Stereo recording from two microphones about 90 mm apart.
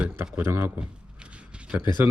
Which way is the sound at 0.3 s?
15° right (ahead or behind).